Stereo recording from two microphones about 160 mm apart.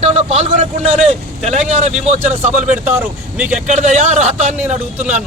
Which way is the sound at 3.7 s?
50° right (ahead or behind).